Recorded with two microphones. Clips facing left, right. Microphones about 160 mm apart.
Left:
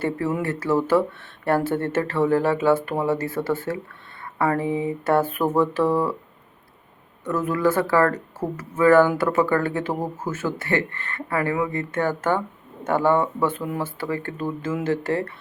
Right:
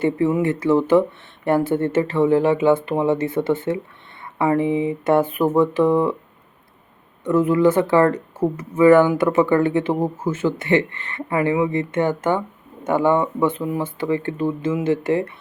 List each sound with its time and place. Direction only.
0.4 s speech: 20° right (ahead or behind)
7.3 s speech: 20° right (ahead or behind)